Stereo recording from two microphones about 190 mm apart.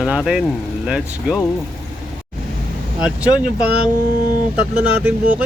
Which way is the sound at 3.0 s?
5° right (ahead or behind).